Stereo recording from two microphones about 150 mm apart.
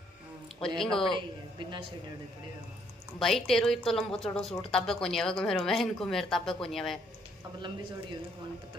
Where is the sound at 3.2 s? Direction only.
Centre (ahead or behind).